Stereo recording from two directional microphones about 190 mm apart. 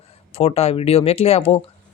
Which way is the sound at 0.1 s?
30° left (ahead or behind).